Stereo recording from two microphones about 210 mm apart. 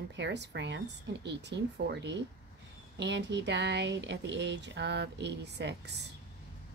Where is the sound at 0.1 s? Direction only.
55° right (ahead or behind).